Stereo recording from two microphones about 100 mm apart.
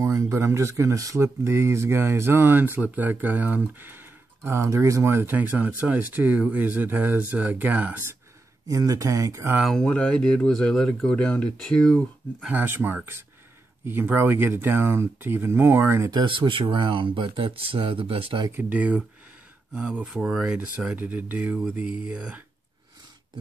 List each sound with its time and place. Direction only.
0.0 s speech: 30° right (ahead or behind)
8.6 s speech: 35° right (ahead or behind)
9.6 s speech: centre (ahead or behind)
12.4 s speech: 20° right (ahead or behind)
16.1 s speech: 50° right (ahead or behind); by 18.4 s 65° right (ahead or behind)
18.5 s speech: 15° right (ahead or behind)